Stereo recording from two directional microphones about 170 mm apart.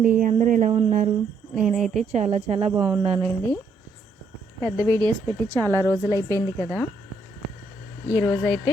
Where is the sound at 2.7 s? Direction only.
25° right (ahead or behind).